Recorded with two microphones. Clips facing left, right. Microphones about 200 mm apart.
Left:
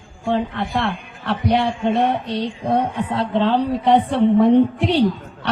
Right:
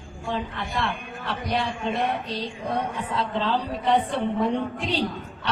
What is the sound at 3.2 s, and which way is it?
Speech, 65° left (ahead or behind).